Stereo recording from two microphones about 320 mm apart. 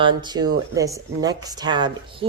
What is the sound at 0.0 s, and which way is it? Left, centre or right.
Speech, centre.